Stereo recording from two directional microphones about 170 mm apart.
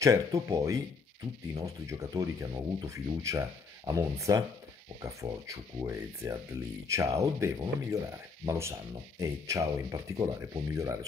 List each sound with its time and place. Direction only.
0.0 s speech: 20° right (ahead or behind)